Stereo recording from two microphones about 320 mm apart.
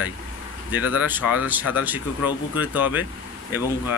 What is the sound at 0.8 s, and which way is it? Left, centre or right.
Speech, left.